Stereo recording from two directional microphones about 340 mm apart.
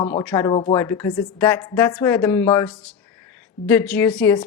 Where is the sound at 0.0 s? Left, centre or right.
Centre.